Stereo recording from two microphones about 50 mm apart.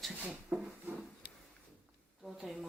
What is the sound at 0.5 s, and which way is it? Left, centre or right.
Wood, right.